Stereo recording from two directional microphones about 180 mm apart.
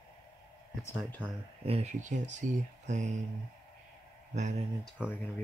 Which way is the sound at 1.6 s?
35° right (ahead or behind).